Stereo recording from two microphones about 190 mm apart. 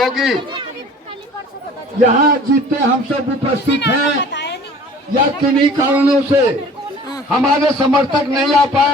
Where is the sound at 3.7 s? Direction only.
65° left (ahead or behind).